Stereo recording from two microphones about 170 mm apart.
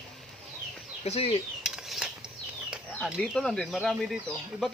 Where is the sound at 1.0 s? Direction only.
35° left (ahead or behind).